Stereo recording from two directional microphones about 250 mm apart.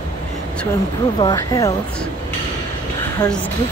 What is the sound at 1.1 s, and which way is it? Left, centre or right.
Speech, centre.